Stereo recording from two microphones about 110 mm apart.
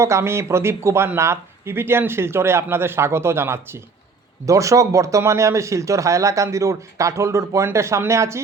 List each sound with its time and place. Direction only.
0.0 s speech: 25° right (ahead or behind)